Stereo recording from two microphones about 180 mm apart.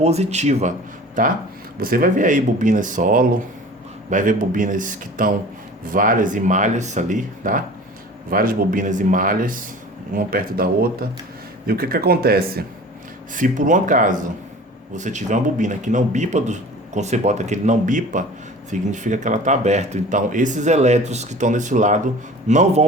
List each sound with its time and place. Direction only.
0.0 s speech: 35° right (ahead or behind)
1.8 s speech: 50° right (ahead or behind)
13.3 s speech: 45° right (ahead or behind)